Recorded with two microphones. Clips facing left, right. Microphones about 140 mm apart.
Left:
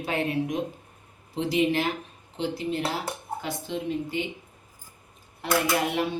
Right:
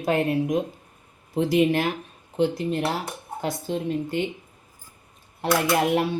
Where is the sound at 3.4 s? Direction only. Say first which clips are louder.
Right 8 dB; 45° right (ahead or behind).